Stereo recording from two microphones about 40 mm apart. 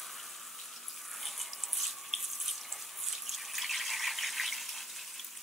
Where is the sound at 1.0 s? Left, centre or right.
Centre.